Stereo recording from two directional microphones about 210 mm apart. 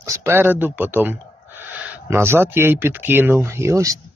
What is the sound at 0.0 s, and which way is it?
Speech, 10° right (ahead or behind).